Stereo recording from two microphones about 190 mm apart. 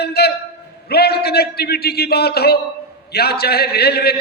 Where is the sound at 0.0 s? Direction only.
60° left (ahead or behind).